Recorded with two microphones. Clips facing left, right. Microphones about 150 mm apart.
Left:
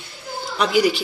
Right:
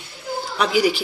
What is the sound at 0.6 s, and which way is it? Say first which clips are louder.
Speech: left 1 dB; 10° right (ahead or behind).